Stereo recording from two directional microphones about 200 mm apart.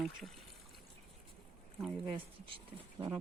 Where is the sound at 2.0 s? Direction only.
25° right (ahead or behind).